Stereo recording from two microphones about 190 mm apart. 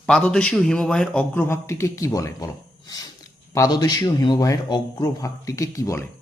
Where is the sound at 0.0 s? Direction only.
5° left (ahead or behind).